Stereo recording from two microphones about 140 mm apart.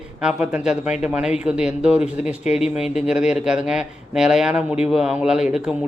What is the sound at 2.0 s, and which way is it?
Speech, 55° left (ahead or behind).